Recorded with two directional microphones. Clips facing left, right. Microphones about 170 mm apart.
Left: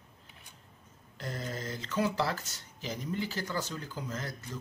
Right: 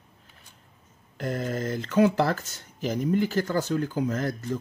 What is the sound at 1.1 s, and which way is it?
Speech, 55° right (ahead or behind).